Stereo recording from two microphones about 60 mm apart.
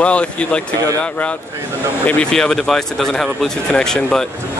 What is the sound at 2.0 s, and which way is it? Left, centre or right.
Speech, left.